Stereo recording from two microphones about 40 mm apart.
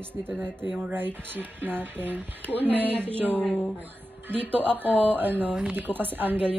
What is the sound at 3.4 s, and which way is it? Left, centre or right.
Speech, left.